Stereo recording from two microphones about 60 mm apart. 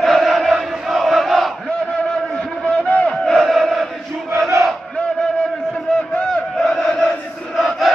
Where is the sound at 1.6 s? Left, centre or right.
Centre.